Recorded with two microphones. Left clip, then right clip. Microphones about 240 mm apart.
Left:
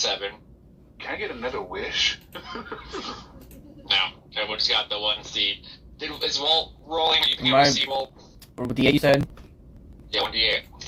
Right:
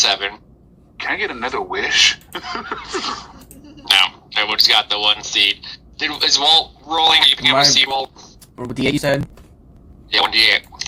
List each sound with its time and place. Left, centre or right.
0.0 s speech: right
8.7 s speech: centre
10.1 s speech: right